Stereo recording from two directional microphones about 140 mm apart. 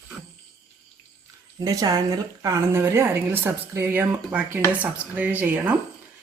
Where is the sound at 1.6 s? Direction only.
25° right (ahead or behind).